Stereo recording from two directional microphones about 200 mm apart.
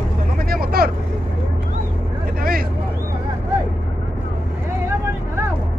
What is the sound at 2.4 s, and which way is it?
Vehicle, 45° right (ahead or behind).